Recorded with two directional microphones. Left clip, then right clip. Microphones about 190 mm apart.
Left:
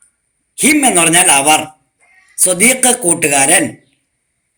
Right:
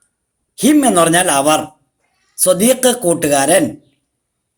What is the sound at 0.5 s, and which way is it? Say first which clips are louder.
A man's voice: even; 50° right (ahead or behind).